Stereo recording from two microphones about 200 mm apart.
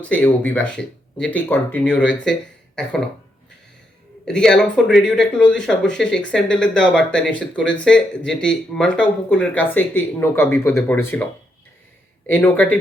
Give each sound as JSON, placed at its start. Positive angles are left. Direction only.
{"t": 0.0, "sound": "speech", "side_deg": 5}
{"t": 4.3, "sound": "speech", "side_deg": 5}